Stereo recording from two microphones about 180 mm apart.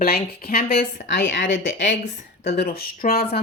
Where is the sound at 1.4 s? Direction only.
90° left.